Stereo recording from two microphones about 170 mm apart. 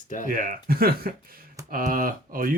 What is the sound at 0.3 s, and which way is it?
Speech, 50° right (ahead or behind).